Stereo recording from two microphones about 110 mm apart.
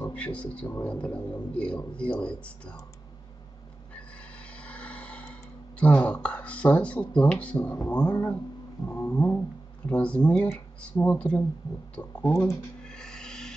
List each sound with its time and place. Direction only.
0.1 s speech: 10° left (ahead or behind)
4.6 s helicopter: 10° left (ahead or behind)
5.8 s speech: 10° left (ahead or behind)
12.3 s speech: 25° left (ahead or behind)
12.8 s filing: 5° left (ahead or behind)